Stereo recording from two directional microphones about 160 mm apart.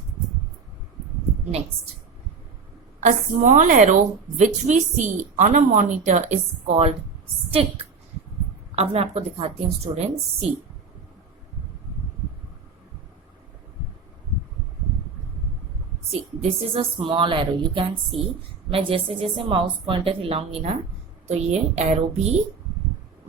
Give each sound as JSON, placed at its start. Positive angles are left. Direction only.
{"t": 3.0, "sound": "a woman's voice", "side_deg": -50}
{"t": 16.4, "sound": "a woman's voice", "side_deg": -35}